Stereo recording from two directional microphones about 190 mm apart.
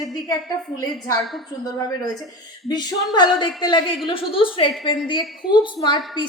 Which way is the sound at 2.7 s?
20° left (ahead or behind).